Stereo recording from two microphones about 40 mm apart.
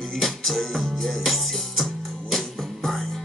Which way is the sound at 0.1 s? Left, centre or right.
Centre.